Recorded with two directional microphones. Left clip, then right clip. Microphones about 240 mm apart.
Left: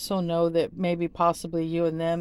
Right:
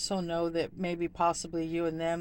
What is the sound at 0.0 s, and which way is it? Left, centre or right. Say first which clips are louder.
Speech: left 6 dB; left.